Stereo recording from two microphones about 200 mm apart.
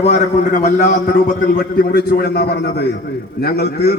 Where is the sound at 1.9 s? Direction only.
55° left (ahead or behind).